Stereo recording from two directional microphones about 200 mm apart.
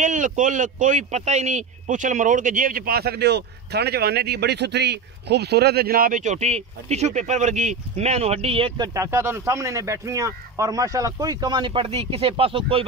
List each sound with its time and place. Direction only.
0.0 s speech: 40° right (ahead or behind)